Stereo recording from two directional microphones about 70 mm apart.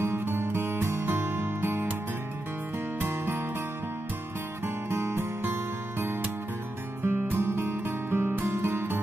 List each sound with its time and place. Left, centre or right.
0.0 s music: right
3.0 s music: right
4.8 s music: right